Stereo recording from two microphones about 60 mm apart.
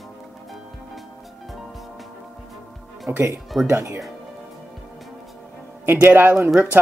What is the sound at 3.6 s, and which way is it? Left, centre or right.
Speech, right.